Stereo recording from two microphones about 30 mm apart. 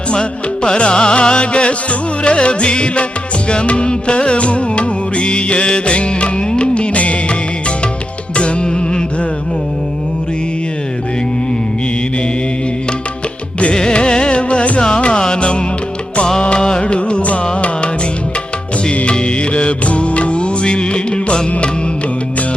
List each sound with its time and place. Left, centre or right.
0.1 s music: left
8.4 s music: left
13.9 s music: left
14.8 s carnatic music: left
15.4 s music: left
16.6 s music: left
16.8 s music: left
19.0 s music: left